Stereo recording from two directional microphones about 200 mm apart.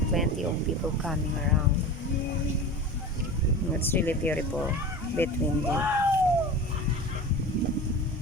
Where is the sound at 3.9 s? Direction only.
10° left (ahead or behind).